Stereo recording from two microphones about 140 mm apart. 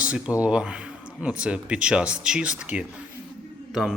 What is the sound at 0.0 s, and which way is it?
Speech, 10° right (ahead or behind).